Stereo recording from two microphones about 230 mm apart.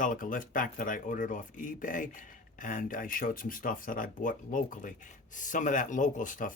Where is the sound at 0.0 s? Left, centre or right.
Left.